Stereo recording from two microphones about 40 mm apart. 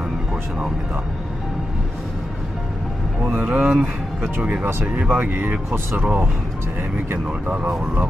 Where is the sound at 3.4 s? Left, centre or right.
Right.